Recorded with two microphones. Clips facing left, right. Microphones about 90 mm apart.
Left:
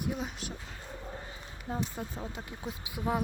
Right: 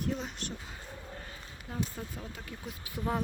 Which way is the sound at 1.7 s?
25° left (ahead or behind).